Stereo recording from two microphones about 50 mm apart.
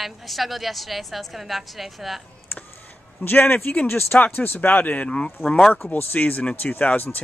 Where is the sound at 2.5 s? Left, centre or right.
Left.